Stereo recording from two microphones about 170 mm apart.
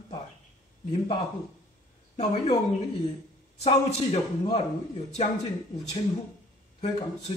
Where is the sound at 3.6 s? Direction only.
35° left (ahead or behind).